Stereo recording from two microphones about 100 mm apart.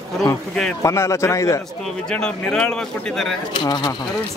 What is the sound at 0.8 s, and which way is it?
Speech, 30° left (ahead or behind).